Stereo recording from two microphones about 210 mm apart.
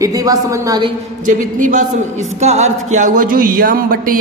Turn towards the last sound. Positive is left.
turn(degrees=-40)  # may be behind; listen again after turning